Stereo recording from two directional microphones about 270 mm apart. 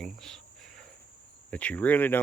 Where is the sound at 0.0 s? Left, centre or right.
Centre.